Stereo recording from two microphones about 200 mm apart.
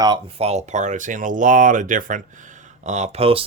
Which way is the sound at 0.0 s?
25° right (ahead or behind).